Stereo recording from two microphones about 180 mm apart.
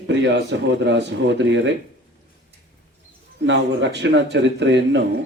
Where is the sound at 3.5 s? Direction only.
75° right (ahead or behind).